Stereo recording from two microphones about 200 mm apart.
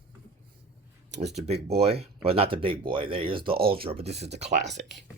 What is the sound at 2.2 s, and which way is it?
Speech, 30° right (ahead or behind).